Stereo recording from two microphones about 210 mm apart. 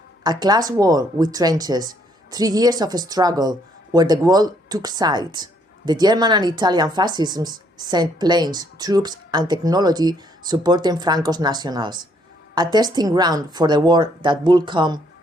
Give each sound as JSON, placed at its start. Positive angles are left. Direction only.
{"t": 0.2, "sound": "speech", "side_deg": -20}